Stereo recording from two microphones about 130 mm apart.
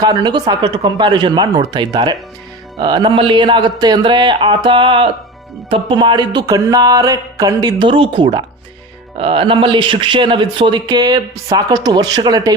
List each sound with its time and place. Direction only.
0.0 s speech: 30° right (ahead or behind)